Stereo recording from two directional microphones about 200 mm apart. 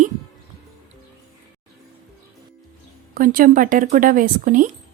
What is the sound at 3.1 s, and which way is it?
Speech, 45° right (ahead or behind).